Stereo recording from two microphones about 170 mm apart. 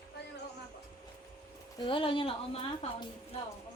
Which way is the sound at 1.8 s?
30° left (ahead or behind).